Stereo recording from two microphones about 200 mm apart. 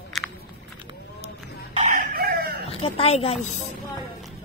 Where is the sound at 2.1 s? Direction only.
50° right (ahead or behind).